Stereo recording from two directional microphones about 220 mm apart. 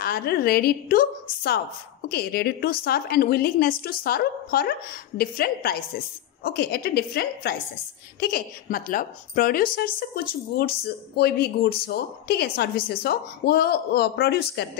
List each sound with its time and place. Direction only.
0.0 s a woman's voice: 45° left (ahead or behind)
2.0 s a woman's voice: 45° left (ahead or behind)